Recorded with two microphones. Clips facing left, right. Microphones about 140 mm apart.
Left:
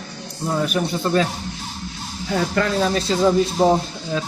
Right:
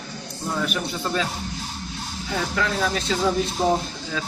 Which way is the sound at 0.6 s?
40° left (ahead or behind).